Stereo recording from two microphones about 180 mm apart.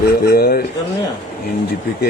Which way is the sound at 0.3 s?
55° left (ahead or behind).